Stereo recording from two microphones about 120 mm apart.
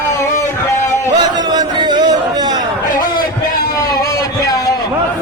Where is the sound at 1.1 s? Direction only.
35° right (ahead or behind).